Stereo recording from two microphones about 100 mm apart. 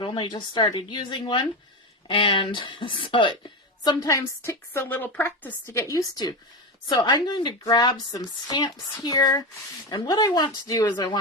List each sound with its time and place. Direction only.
0.0 s speech: 55° left (ahead or behind)
0.6 s a woman's voice: 65° left (ahead or behind)
3.8 s a woman's voice: 35° left (ahead or behind)
5.7 s a woman's voice: 35° left (ahead or behind)